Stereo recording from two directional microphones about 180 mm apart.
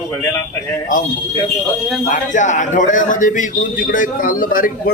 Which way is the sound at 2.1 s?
45° left (ahead or behind).